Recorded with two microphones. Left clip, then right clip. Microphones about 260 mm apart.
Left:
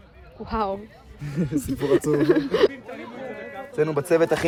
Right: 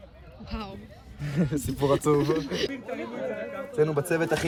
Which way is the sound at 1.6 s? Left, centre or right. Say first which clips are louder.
Left 4 dB; centre.